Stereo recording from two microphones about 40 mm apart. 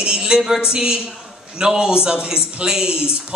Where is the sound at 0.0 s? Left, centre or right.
Right.